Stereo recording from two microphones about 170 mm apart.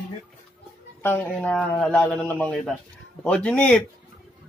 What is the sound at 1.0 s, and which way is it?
Speech, 10° left (ahead or behind).